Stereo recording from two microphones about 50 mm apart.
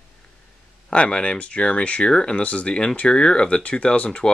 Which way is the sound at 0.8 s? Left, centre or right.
Centre.